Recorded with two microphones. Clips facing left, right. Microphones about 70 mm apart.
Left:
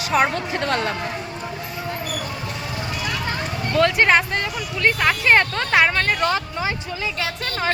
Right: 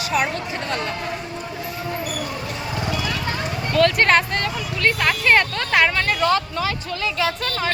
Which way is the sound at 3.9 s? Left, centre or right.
Centre.